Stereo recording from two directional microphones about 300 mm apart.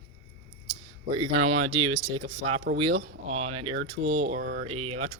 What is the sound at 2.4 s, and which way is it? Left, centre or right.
Speech, right.